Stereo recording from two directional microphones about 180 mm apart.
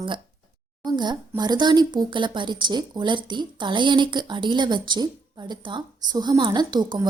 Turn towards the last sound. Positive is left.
turn(degrees=-25)  # may be behind; listen again after turning